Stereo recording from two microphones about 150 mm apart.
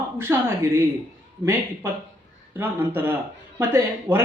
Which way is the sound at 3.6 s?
15° right (ahead or behind).